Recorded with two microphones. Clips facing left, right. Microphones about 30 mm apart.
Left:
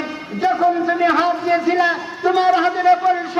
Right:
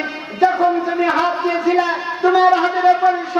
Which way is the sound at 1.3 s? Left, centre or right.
Centre.